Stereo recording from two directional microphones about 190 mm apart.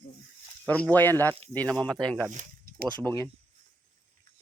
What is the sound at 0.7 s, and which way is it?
Speech, 10° left (ahead or behind).